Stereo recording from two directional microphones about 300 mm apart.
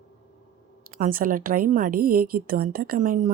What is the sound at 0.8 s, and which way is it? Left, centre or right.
A woman's voice, right.